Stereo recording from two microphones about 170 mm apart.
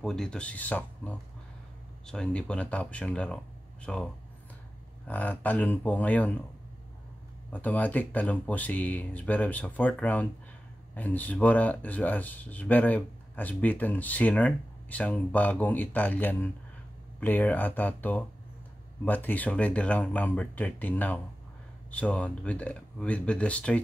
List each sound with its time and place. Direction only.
0.0 s speech: 5° left (ahead or behind)
7.5 s speech: 10° left (ahead or behind)